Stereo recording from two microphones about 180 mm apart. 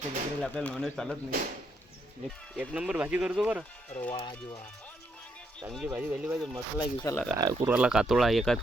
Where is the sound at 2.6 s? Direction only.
5° right (ahead or behind).